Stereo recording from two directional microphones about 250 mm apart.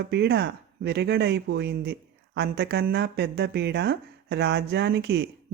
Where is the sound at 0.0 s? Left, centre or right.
Right.